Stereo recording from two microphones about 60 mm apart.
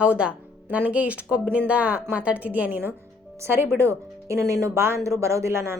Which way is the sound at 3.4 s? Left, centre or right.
Right.